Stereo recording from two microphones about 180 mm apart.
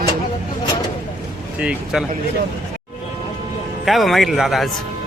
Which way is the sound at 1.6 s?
Centre (ahead or behind).